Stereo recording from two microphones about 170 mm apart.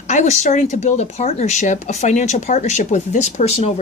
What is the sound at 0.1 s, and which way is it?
Speech, 45° left (ahead or behind).